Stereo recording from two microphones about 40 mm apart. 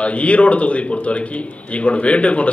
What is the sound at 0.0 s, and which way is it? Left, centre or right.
A man's voice, left.